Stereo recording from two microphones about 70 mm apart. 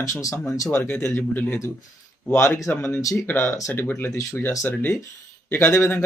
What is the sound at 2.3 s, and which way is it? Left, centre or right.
Speech, left.